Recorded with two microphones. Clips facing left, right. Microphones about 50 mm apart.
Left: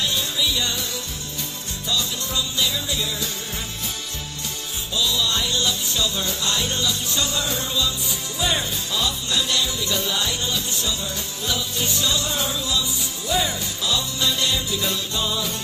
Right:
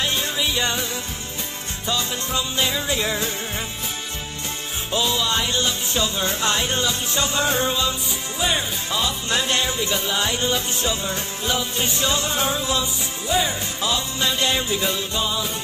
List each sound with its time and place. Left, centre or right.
0.0 s music: right
1.9 s music: right
4.9 s music: right
13.8 s music: right